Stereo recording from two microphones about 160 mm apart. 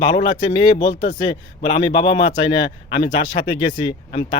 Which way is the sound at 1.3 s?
30° left (ahead or behind).